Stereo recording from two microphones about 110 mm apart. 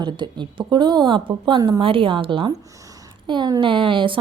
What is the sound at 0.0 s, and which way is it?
A woman's voice, 45° right (ahead or behind).